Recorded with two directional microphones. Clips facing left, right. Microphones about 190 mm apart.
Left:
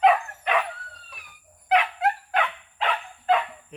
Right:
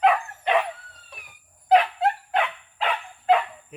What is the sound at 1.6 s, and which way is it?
Dog, 35° right (ahead or behind).